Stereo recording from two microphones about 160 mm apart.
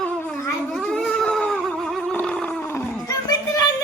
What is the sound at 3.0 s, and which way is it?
Children playing, 25° left (ahead or behind).